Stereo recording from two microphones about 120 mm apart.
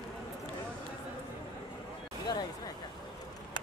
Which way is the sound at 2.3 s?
35° left (ahead or behind).